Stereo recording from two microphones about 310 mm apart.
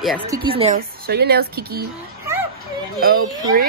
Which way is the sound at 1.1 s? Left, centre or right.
Right.